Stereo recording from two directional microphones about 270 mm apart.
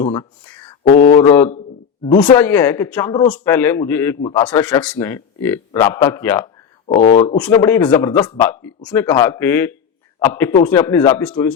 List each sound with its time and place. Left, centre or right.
0.0 s speech: centre
6.8 s speech: left
7.3 s speech: centre